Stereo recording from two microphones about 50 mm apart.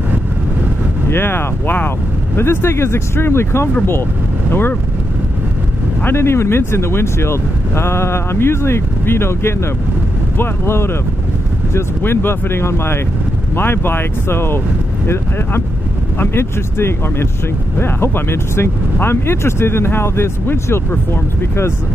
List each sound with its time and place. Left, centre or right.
1.1 s speech: left
2.3 s speech: left
6.0 s speech: left
12.0 s speech: left